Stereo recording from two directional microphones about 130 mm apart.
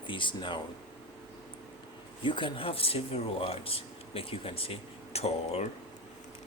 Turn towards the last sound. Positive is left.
turn(degrees=50)  # may be behind; listen again after turning